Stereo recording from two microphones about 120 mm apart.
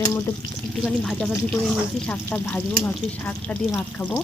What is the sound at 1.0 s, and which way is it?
Speech, 5° left (ahead or behind).